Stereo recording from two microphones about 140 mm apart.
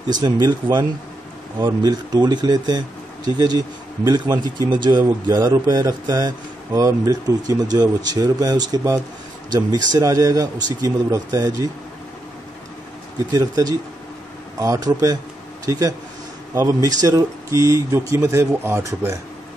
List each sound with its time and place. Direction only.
0.1 s a man's voice: 30° right (ahead or behind)
13.3 s a man's voice: 25° right (ahead or behind)